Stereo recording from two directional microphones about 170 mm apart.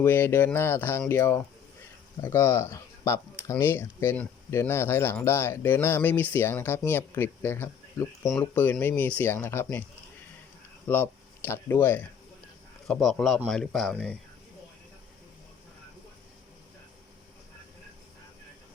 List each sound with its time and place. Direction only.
0.0 s speech: 15° left (ahead or behind)
10.8 s speech: 10° left (ahead or behind)
12.9 s speech: centre (ahead or behind)